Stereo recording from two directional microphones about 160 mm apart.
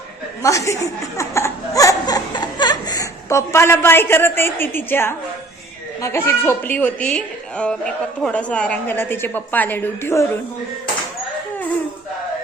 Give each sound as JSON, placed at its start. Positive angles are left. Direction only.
{"t": 0.4, "sound": "a woman's voice", "side_deg": 20}